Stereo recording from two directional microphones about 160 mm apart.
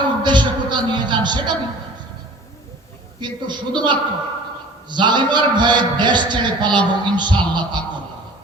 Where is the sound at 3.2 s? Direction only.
30° right (ahead or behind).